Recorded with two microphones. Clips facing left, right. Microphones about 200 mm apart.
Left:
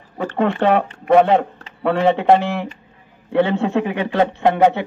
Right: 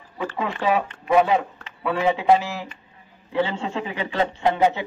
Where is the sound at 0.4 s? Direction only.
60° left (ahead or behind).